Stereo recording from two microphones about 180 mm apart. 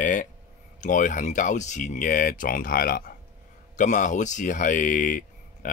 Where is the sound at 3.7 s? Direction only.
45° left (ahead or behind).